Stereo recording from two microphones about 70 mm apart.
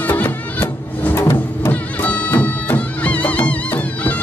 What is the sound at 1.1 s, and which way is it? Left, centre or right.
Music, left.